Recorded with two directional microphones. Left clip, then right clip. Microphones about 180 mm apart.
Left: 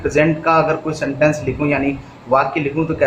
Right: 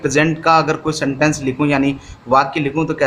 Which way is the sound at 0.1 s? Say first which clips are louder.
Right 1 dB; 55° right (ahead or behind).